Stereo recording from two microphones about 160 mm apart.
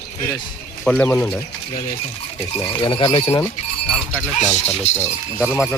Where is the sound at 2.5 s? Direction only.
30° left (ahead or behind).